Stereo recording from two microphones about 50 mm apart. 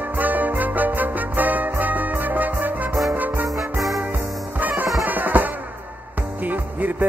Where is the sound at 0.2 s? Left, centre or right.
Right.